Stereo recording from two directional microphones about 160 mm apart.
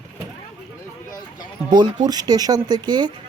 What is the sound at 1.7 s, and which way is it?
Speech, 25° right (ahead or behind).